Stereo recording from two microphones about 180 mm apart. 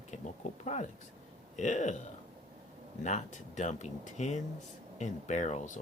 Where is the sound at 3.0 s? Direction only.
40° left (ahead or behind).